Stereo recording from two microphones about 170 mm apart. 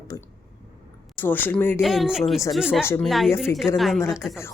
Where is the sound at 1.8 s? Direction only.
Centre (ahead or behind).